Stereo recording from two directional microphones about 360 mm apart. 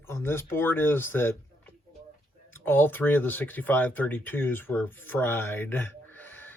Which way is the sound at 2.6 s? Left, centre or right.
Centre.